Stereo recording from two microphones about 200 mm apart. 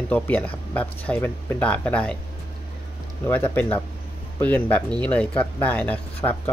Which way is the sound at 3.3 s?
10° left (ahead or behind).